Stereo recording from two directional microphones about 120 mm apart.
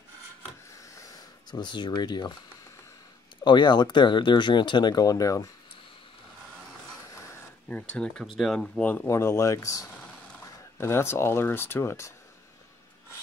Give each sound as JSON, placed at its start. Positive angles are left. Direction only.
{"t": 0.9, "sound": "a sound", "side_deg": 30}
{"t": 3.4, "sound": "speech", "side_deg": 40}
{"t": 7.6, "sound": "speech", "side_deg": 10}
{"t": 9.0, "sound": "speech", "side_deg": 25}